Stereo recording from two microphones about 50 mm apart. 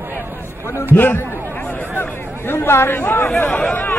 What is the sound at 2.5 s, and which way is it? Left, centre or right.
Speech, left.